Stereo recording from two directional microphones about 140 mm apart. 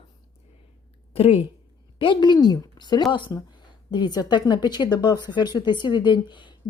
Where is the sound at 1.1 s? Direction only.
40° left (ahead or behind).